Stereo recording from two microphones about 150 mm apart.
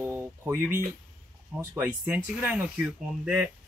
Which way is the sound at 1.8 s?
10° right (ahead or behind).